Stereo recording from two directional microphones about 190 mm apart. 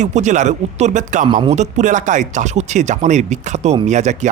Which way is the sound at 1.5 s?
40° right (ahead or behind).